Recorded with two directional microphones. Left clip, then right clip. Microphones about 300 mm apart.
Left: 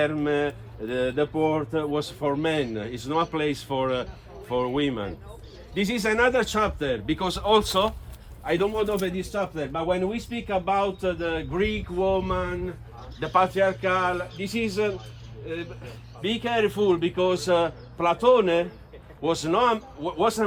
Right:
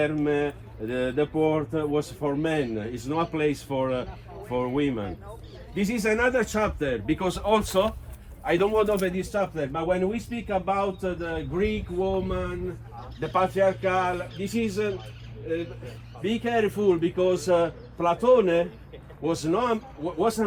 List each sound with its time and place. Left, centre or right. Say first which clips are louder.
0.0 s a man's voice: left 1 dB; centre
11.5 s a sound: left 1 dB; centre
13.1 s speech: left 2 dB; centre
14.0 s a man's voice: left 1 dB; centre
16.2 s speech: left 1 dB; centre